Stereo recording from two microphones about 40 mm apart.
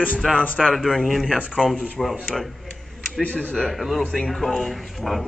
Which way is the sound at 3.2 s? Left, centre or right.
Left.